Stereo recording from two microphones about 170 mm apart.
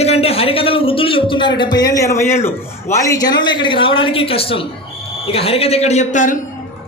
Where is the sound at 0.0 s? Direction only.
35° left (ahead or behind).